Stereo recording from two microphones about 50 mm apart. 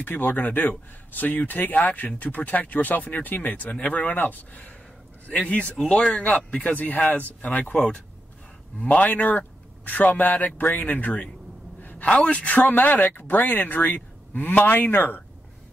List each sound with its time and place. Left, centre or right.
0.0 s speech: left
11.8 s gasp: left
12.1 s speech: left